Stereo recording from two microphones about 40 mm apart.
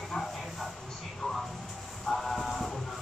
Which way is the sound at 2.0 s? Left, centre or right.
Centre.